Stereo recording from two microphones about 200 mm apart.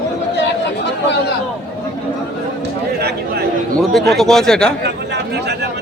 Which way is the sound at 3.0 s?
55° right (ahead or behind).